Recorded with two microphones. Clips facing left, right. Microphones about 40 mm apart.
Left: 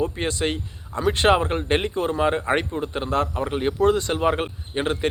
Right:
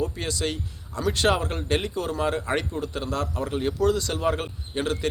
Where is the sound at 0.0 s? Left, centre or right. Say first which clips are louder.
Left 4 dB; left.